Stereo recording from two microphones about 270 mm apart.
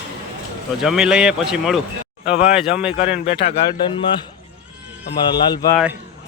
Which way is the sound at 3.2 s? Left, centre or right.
Left.